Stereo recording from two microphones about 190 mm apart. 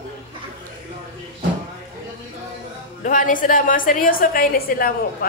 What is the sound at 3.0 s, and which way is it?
A woman's voice, 45° left (ahead or behind).